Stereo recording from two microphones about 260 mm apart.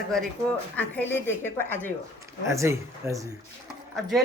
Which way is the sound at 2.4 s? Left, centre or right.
Centre.